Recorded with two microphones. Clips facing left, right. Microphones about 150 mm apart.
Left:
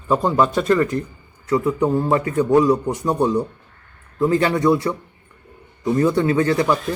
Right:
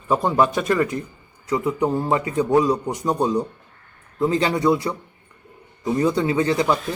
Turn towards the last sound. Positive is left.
turn(degrees=-20)  # may be behind; listen again after turning